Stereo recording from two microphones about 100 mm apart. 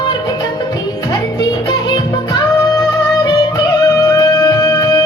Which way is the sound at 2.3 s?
45° left (ahead or behind).